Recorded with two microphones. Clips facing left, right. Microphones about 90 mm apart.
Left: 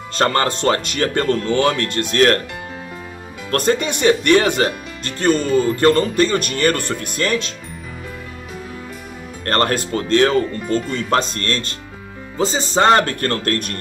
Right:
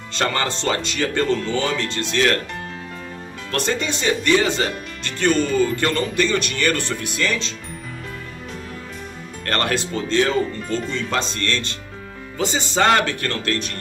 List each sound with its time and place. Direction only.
0.1 s speech: 45° left (ahead or behind)
3.5 s speech: 50° left (ahead or behind)
9.4 s speech: 40° left (ahead or behind)
12.4 s speech: 35° left (ahead or behind)